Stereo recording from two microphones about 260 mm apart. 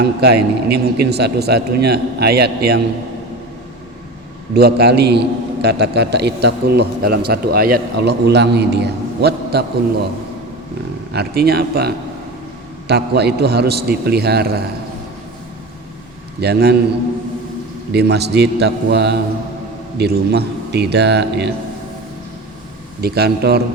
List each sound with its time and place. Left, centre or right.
0.0 s a man's voice: right
4.5 s a man's voice: right
11.1 s a man's voice: right
16.4 s a man's voice: right
17.9 s a man's voice: right
23.0 s a man's voice: right